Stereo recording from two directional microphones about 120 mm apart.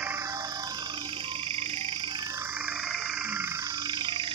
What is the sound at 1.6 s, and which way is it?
Frog, 50° right (ahead or behind).